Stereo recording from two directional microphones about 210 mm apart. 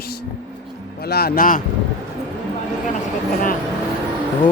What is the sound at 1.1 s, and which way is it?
Speech, 50° left (ahead or behind).